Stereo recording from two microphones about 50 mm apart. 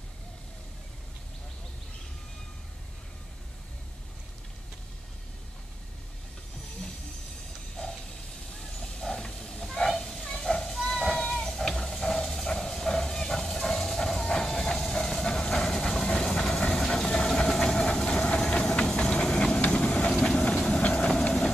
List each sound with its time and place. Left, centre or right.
8.7 s hiss: centre
10.9 s a sound: centre
18.4 s steam: centre
19.6 s vehicle: left